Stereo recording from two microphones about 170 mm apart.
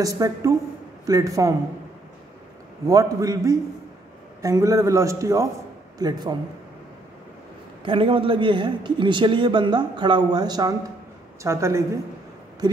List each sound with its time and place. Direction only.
0.0 s speech: 20° right (ahead or behind)
2.9 s speech: 20° right (ahead or behind)
7.8 s a woman's voice: 30° right (ahead or behind)